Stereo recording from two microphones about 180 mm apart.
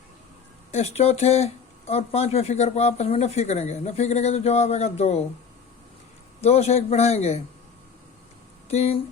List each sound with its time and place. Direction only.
0.7 s speech: 35° left (ahead or behind)
6.4 s speech: 35° left (ahead or behind)
8.7 s speech: 35° left (ahead or behind)